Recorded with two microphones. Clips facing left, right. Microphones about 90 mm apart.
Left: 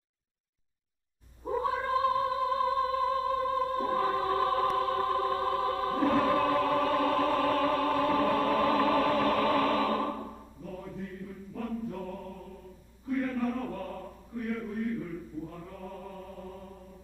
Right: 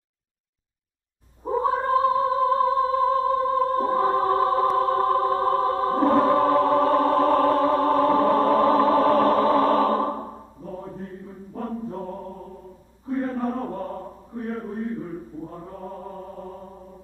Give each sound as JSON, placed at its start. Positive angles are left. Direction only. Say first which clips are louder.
{"t": 1.4, "sound": "music", "louder": "right 7 dB", "side_deg": -35}